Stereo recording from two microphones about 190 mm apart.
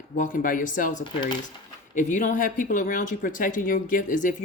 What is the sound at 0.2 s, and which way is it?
Speech, 45° left (ahead or behind).